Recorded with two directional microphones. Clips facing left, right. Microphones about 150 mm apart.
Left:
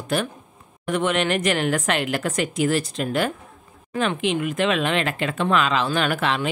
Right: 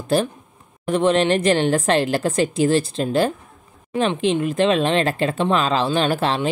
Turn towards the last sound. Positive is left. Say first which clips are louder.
# right 3 dB
turn(degrees=-30)  # may be behind; listen again after turning